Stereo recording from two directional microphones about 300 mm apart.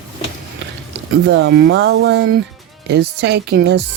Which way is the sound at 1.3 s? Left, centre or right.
Right.